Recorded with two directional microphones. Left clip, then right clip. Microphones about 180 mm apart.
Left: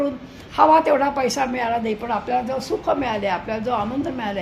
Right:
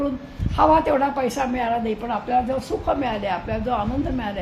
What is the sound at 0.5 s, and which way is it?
A woman's voice, 30° left (ahead or behind).